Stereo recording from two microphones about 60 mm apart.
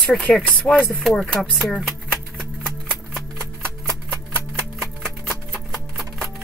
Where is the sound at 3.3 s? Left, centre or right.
Centre.